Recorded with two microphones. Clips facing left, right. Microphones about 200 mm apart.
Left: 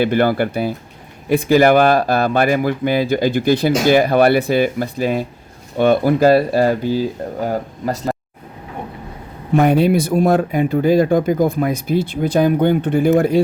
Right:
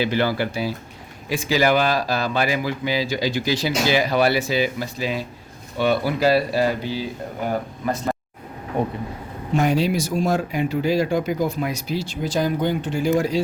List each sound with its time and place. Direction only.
0.0 s speech: 55° left (ahead or behind); by 8.1 s 40° left (ahead or behind)
9.6 s speech: 60° left (ahead or behind)